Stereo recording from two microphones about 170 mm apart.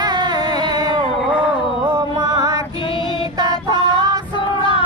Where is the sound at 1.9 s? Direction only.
25° right (ahead or behind).